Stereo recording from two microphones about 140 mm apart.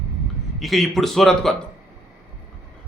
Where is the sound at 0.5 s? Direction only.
Centre (ahead or behind).